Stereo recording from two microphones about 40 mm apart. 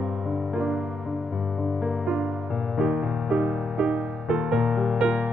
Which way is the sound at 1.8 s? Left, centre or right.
Centre.